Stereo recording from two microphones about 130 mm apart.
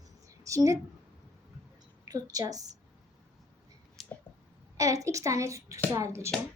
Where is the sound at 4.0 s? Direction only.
Centre (ahead or behind).